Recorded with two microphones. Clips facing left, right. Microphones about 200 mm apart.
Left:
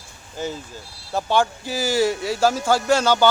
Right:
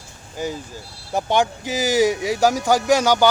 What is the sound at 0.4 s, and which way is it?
Speech, 15° right (ahead or behind).